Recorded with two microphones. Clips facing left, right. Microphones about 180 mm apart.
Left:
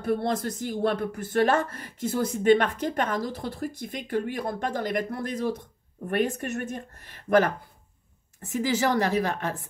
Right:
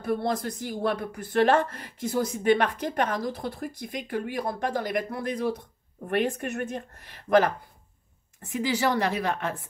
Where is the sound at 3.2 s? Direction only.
50° right (ahead or behind).